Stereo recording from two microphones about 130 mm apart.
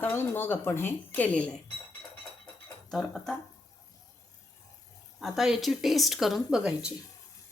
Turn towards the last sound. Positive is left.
turn(degrees=-5)  # may be behind; listen again after turning